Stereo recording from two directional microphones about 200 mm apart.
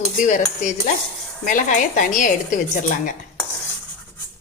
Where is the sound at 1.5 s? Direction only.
40° left (ahead or behind).